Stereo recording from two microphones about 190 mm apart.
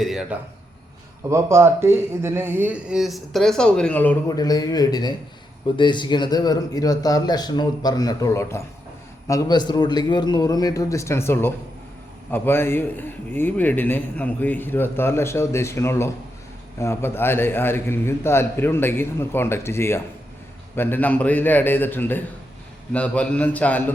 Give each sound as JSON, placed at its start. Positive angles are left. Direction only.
{"t": 0.0, "sound": "a sound", "side_deg": 0}
{"t": 1.3, "sound": "speech", "side_deg": -15}
{"t": 4.4, "sound": "a man's voice", "side_deg": 20}